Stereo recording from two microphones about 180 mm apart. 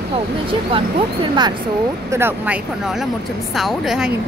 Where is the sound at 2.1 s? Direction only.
10° right (ahead or behind).